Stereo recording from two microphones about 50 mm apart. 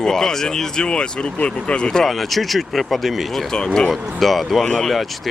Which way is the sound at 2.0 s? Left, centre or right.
Centre.